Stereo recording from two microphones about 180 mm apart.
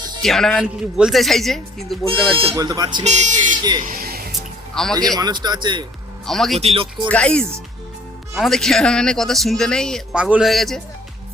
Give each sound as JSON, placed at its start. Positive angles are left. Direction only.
{"t": 0.2, "sound": "speech", "side_deg": 0}
{"t": 2.3, "sound": "speech", "side_deg": -30}
{"t": 2.6, "sound": "speech", "side_deg": -20}
{"t": 3.0, "sound": "speech", "side_deg": -40}
{"t": 3.8, "sound": "music", "side_deg": -55}
{"t": 4.3, "sound": "music", "side_deg": 0}
{"t": 4.9, "sound": "speech", "side_deg": -20}
{"t": 6.2, "sound": "speech", "side_deg": 0}
{"t": 6.6, "sound": "speech", "side_deg": -35}
{"t": 7.1, "sound": "speech", "side_deg": 5}